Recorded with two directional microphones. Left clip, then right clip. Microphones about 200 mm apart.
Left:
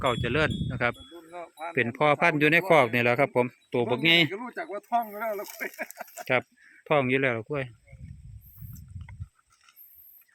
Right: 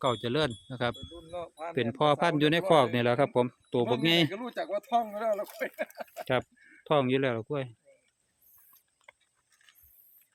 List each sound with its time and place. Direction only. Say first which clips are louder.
0.0 s speech: left 3 dB; centre (ahead or behind)
1.3 s speech: even; 35° right (ahead or behind)
1.7 s speech: left 3 dB; centre (ahead or behind)
4.3 s speech: right 1 dB; 30° right (ahead or behind)
6.3 s speech: left 4 dB; centre (ahead or behind)